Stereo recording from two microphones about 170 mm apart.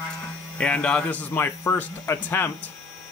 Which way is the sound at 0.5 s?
5° left (ahead or behind).